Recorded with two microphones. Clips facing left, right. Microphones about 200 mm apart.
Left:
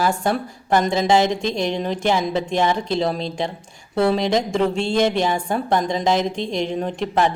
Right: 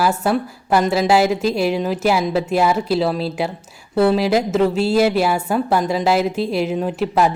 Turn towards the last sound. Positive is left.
turn(degrees=-5)  # may be behind; listen again after turning